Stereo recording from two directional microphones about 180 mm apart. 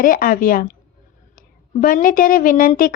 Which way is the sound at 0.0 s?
50° left (ahead or behind).